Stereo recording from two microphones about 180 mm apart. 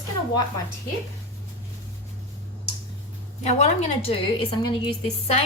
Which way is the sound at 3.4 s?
35° left (ahead or behind).